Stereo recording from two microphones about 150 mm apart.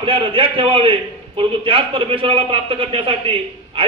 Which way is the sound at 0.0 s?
35° right (ahead or behind).